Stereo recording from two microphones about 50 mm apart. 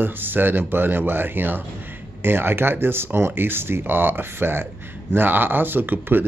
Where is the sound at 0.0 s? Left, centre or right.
Right.